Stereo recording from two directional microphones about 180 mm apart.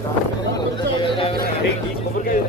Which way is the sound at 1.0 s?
30° left (ahead or behind).